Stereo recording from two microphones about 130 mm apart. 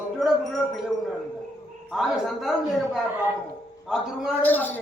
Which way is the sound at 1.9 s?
Centre (ahead or behind).